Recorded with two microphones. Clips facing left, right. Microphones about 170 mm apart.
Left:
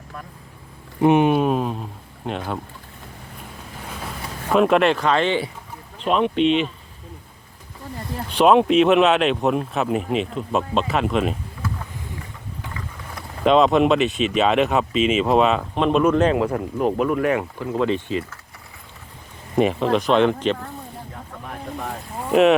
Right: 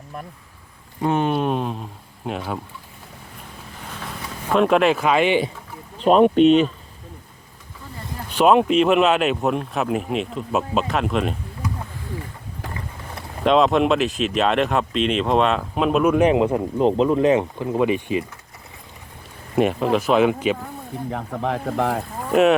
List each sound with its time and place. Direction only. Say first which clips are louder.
1.0 s speech: left 4 dB; 15° left (ahead or behind); by 2.4 s centre (ahead or behind)
4.4 s speech: even; centre (ahead or behind)
6.1 s speech: right 5 dB; 45° right (ahead or behind)
8.3 s speech: left 1 dB; 5° right (ahead or behind)
12.6 s vehicle: right 3 dB; 30° right (ahead or behind)
13.4 s speech: left 1 dB; centre (ahead or behind); by 18.3 s 15° right (ahead or behind)
19.5 s speech: even; centre (ahead or behind)
21.1 s speech: right 11 dB; 90° right
22.2 s speech: left 1 dB; centre (ahead or behind)